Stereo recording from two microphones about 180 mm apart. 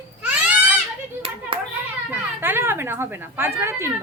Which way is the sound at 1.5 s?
30° right (ahead or behind).